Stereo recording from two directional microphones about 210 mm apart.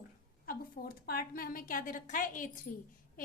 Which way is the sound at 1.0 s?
45° left (ahead or behind).